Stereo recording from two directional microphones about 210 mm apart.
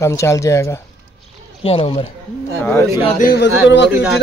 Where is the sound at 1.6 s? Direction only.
25° left (ahead or behind).